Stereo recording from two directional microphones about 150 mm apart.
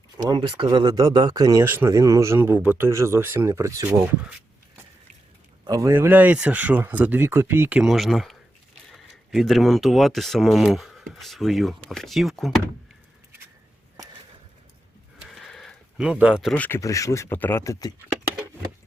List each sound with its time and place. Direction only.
0.2 s speech: 30° right (ahead or behind)
5.6 s speech: 25° right (ahead or behind)
7.8 s speech: centre (ahead or behind)
15.2 s a sound: centre (ahead or behind)
16.6 s speech: 15° left (ahead or behind)